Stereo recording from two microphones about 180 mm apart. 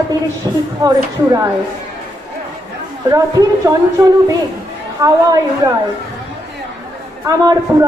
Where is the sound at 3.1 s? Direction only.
20° right (ahead or behind).